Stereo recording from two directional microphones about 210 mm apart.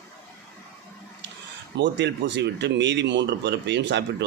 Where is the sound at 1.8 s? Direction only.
55° right (ahead or behind).